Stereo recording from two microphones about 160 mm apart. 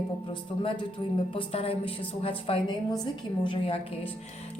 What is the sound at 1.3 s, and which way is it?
A woman's voice, 35° left (ahead or behind).